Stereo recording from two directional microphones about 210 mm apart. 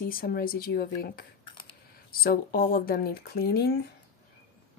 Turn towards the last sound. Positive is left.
turn(degrees=50)  # may be behind; listen again after turning